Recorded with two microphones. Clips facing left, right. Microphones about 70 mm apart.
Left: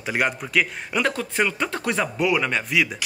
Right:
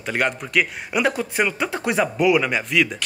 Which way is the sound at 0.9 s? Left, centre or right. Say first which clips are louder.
Right 2 dB; centre.